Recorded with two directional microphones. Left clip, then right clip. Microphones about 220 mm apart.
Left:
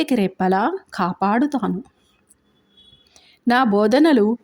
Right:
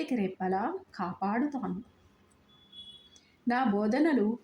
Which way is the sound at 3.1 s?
35° left (ahead or behind).